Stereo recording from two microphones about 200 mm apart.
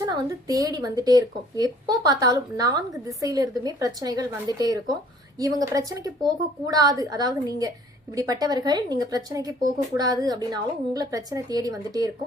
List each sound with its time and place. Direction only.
0.0 s speech: 15° right (ahead or behind)